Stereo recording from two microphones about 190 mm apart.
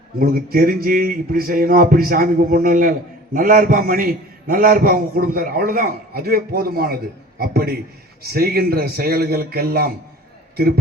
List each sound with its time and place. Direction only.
0.2 s a man's voice: 50° right (ahead or behind)